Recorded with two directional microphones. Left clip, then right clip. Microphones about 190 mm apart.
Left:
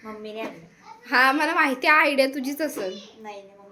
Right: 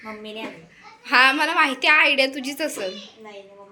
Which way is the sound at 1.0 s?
15° left (ahead or behind).